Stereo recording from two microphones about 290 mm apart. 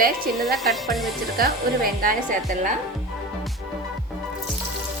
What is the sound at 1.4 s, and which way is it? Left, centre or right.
Speech, right.